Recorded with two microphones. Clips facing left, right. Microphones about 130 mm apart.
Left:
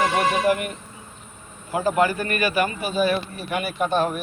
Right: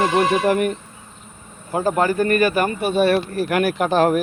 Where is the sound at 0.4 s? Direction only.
45° right (ahead or behind).